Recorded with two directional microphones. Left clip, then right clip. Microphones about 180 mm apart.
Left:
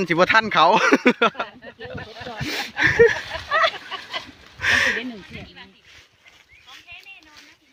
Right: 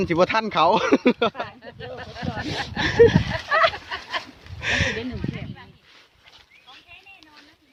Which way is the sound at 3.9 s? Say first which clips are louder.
Right 1 dB; centre (ahead or behind).